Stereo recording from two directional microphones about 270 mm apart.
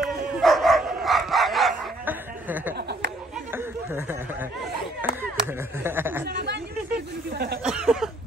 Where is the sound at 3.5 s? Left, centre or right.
Centre.